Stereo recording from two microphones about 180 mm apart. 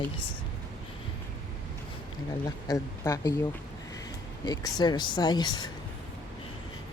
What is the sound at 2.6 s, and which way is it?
Speech, 20° left (ahead or behind).